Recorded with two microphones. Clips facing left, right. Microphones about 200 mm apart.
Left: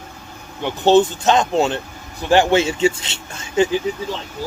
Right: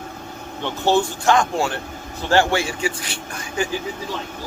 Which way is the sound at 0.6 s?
20° left (ahead or behind).